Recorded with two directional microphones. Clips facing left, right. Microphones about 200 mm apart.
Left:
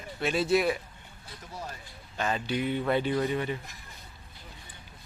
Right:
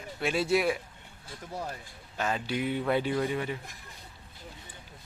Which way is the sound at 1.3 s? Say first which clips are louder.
Right 4 dB; 55° right (ahead or behind).